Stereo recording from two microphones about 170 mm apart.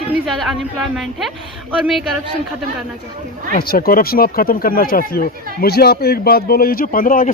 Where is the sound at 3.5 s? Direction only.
60° left (ahead or behind).